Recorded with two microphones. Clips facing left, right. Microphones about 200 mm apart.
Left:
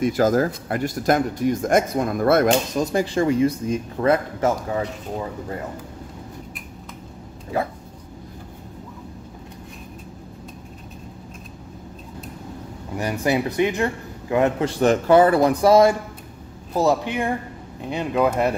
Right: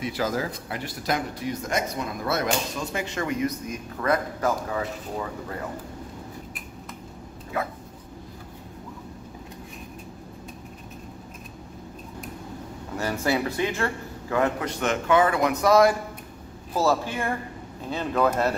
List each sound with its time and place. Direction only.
0.0 s speech: 45° left (ahead or behind)
2.8 s a man's voice: 35° left (ahead or behind)
7.5 s a sound: 30° left (ahead or behind)
12.9 s a man's voice: 15° left (ahead or behind)